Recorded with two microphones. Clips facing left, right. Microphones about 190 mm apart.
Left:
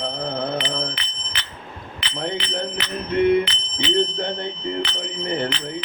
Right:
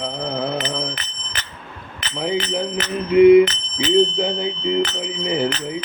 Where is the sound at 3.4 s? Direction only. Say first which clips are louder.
Right 5 dB; 45° right (ahead or behind).